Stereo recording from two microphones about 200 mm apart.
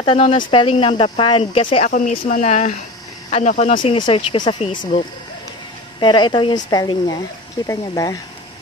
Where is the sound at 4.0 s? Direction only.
25° left (ahead or behind).